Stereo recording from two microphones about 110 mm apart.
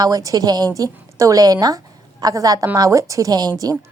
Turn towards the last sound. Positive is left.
turn(degrees=-35)  # may be behind; listen again after turning